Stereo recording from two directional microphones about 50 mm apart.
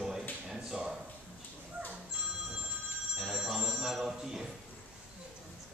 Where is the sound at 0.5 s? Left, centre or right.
Centre.